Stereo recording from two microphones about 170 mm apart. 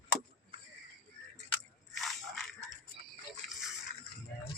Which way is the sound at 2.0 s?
Centre (ahead or behind).